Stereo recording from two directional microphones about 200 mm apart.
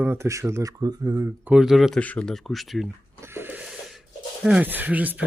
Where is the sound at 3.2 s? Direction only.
10° right (ahead or behind).